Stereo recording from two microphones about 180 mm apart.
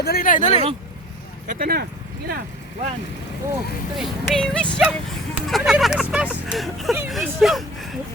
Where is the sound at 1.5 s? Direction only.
55° right (ahead or behind).